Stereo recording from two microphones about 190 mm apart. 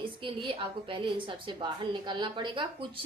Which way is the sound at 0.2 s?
25° right (ahead or behind).